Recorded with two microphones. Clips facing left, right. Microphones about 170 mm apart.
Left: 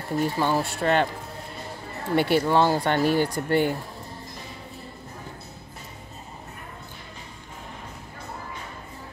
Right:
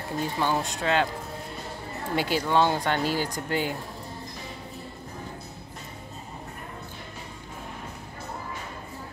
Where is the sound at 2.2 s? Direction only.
65° left (ahead or behind).